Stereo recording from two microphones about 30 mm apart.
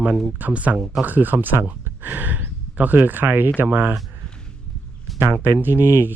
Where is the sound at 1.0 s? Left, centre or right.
Right.